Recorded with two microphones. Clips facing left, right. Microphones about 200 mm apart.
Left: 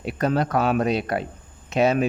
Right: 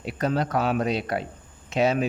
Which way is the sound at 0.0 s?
55° left (ahead or behind).